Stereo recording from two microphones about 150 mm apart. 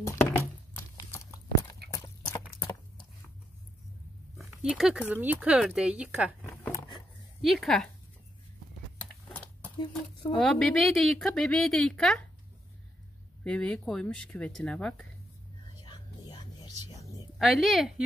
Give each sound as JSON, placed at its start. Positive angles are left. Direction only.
{"t": 0.0, "sound": "chopping", "side_deg": 15}
{"t": 1.9, "sound": "horse", "side_deg": 25}
{"t": 2.6, "sound": "a sound", "side_deg": 30}
{"t": 4.4, "sound": "a sound", "side_deg": -5}
{"t": 5.1, "sound": "speech", "side_deg": -10}
{"t": 6.4, "sound": "a sound", "side_deg": 15}
{"t": 7.4, "sound": "a woman's voice", "side_deg": 0}
{"t": 9.3, "sound": "a sound", "side_deg": 10}
{"t": 10.4, "sound": "a woman's voice", "side_deg": 5}
{"t": 13.4, "sound": "speech", "side_deg": 10}
{"t": 15.8, "sound": "music", "side_deg": 30}
{"t": 17.4, "sound": "a woman's voice", "side_deg": 0}